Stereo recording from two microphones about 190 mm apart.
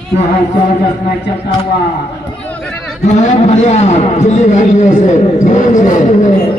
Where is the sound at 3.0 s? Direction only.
40° left (ahead or behind).